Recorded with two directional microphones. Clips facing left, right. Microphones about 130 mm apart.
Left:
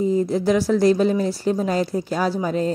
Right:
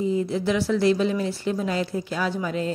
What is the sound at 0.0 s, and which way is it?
Speech, 40° left (ahead or behind).